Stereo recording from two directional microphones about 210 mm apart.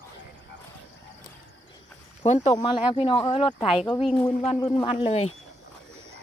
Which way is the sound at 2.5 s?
20° left (ahead or behind).